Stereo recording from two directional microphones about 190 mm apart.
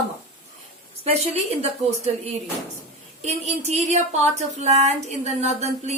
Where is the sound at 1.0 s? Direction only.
35° right (ahead or behind).